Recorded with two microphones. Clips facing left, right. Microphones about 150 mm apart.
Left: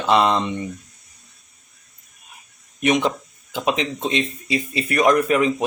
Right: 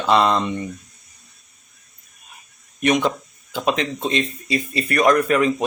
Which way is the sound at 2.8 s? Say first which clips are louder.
Even; 10° left (ahead or behind).